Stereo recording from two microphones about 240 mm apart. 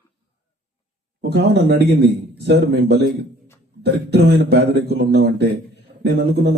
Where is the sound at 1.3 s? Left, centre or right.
Right.